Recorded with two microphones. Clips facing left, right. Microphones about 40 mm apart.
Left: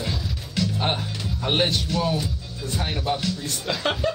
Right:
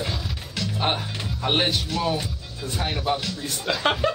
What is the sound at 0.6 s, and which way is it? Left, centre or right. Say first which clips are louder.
Music: left 1 dB; centre.